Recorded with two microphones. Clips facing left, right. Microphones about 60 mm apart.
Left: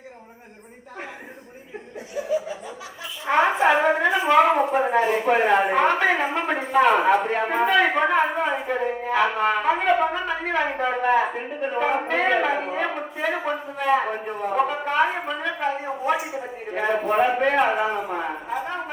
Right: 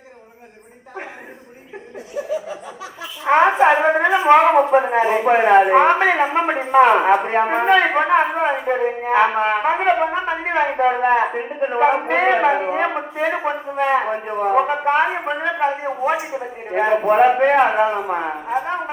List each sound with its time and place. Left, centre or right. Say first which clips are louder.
3.2 s a woman's voice: right 5 dB; right
14.7 s a woman's voice: right 5 dB; right